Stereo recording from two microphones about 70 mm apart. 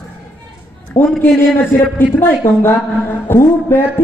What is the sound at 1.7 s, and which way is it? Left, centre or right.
Speech, left.